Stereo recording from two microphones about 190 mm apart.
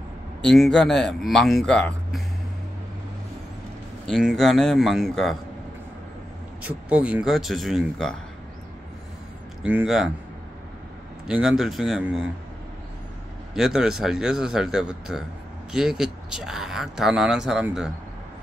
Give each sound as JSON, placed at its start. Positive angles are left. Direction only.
{"t": 0.5, "sound": "speech", "side_deg": 5}
{"t": 4.1, "sound": "speech", "side_deg": 0}
{"t": 6.6, "sound": "speech", "side_deg": -5}
{"t": 9.6, "sound": "speech", "side_deg": -5}
{"t": 11.2, "sound": "speech", "side_deg": -5}
{"t": 13.6, "sound": "speech", "side_deg": 0}